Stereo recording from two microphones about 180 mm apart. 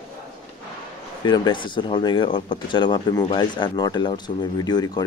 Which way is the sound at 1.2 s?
25° left (ahead or behind).